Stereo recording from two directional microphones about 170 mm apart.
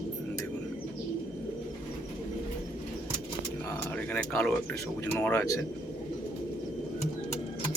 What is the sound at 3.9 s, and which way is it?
Speech, 5° left (ahead or behind).